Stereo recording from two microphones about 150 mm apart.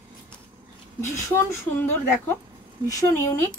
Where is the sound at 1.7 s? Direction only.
15° left (ahead or behind).